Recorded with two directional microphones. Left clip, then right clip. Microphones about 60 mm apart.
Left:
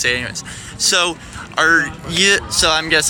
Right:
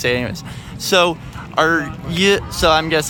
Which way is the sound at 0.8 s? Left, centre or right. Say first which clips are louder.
Right 1 dB; right.